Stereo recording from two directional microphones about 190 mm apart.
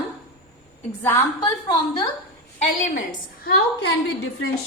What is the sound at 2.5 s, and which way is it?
Speech, 35° left (ahead or behind).